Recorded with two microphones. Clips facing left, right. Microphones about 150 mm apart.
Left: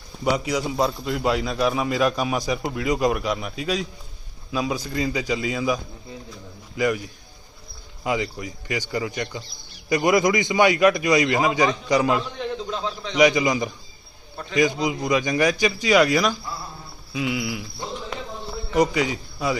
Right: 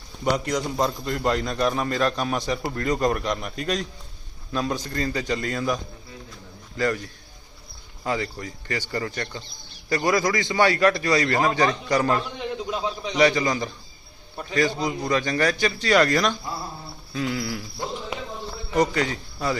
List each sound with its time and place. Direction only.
0.3 s a man's voice: 5° left (ahead or behind)
12.7 s a man's voice: 15° right (ahead or behind)
13.1 s a man's voice: 15° left (ahead or behind)
18.7 s a man's voice: 10° left (ahead or behind)